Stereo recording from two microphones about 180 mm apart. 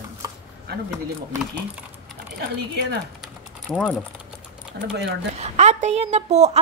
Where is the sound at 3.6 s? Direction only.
5° left (ahead or behind).